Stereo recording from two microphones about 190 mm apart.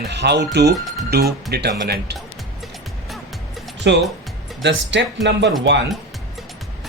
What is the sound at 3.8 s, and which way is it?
Speech, 70° right (ahead or behind).